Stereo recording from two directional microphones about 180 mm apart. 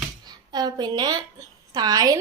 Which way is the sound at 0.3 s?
25° right (ahead or behind).